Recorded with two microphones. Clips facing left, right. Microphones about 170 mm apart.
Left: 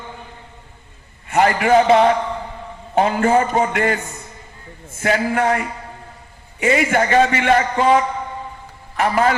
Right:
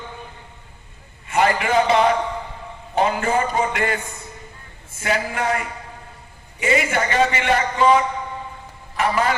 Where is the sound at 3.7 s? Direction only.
50° left (ahead or behind).